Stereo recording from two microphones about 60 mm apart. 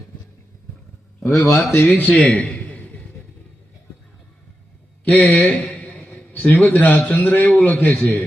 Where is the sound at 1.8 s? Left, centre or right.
Left.